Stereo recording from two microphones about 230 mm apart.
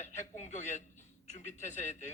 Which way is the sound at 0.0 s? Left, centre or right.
Left.